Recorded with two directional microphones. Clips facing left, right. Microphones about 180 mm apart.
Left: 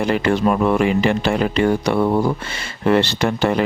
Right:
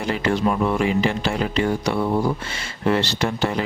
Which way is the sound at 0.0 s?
60° left (ahead or behind).